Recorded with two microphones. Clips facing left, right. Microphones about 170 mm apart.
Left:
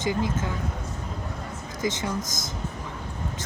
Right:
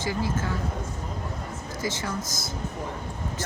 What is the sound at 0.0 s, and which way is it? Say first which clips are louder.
Speech: left 2 dB; 20° left (ahead or behind).